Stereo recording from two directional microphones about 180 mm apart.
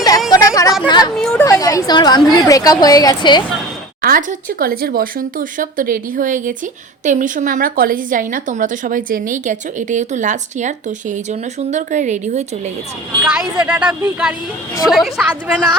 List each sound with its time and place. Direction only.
0.3 s chatter: 20° left (ahead or behind)
0.9 s a woman's voice: 20° left (ahead or behind)
1.1 s chatter: 5° left (ahead or behind)
1.5 s a woman's voice: 20° left (ahead or behind)
4.0 s speech: 50° right (ahead or behind)
13.2 s a woman's voice: 5° right (ahead or behind)